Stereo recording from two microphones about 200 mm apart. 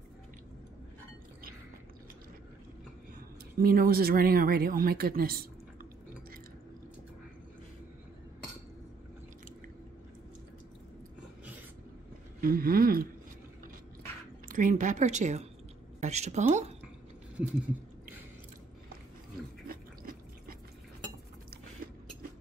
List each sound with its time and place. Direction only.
3.5 s speech: 45° right (ahead or behind)
12.4 s speech: 45° right (ahead or behind)
14.5 s speech: 40° right (ahead or behind)
19.7 s a sound: 45° right (ahead or behind)